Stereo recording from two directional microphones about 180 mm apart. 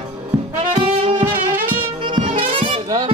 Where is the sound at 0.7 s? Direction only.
30° right (ahead or behind).